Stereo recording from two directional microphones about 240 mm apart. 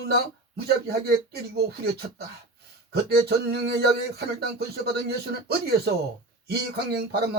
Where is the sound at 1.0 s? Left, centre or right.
Right.